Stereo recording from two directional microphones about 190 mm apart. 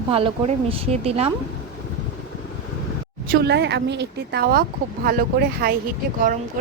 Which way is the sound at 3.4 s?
60° right (ahead or behind).